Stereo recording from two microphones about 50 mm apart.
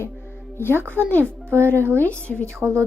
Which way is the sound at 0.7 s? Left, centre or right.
Right.